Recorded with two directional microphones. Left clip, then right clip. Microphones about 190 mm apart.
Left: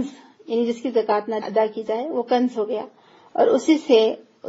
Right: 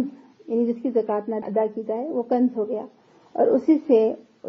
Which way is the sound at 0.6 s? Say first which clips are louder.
Left 1 dB; 25° left (ahead or behind).